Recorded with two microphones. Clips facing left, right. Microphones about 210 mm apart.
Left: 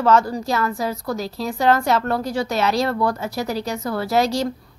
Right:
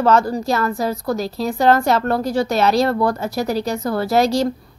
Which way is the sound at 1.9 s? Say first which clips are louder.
Right 3 dB; 35° right (ahead or behind).